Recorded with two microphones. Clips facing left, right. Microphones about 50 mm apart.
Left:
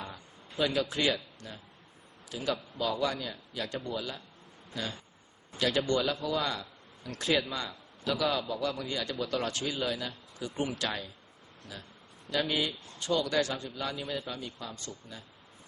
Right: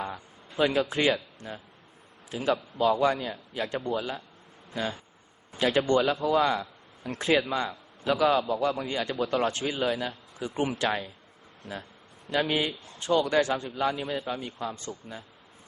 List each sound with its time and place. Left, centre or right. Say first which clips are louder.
0.7 s a man's voice: right 4 dB; right
2.5 s a man's voice: right 7 dB; centre
3.0 s a man's voice: right 7 dB; right
8.3 s a man's voice: right 7 dB; centre
8.6 s a man's voice: right 5 dB; right
12.3 s a man's voice: right 4 dB; right
14.0 s a man's voice: right 4 dB; centre
14.3 s a man's voice: right 7 dB; right
14.9 s speech: right 6 dB; right